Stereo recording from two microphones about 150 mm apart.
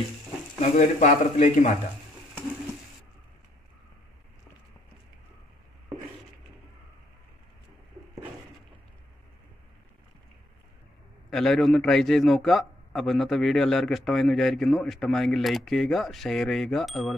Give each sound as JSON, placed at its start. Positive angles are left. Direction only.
{"t": 0.6, "sound": "a man's voice", "side_deg": 50}
{"t": 11.2, "sound": "a man's voice", "side_deg": 0}